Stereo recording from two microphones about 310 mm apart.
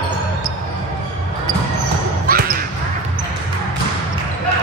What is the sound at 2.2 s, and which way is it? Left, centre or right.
Basketball bounce, right.